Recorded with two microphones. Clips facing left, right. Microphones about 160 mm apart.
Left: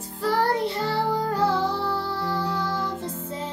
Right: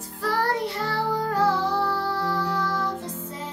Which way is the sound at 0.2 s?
25° left (ahead or behind).